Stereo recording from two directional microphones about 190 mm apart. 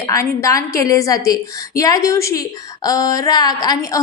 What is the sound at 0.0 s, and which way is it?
A woman's voice, 15° left (ahead or behind).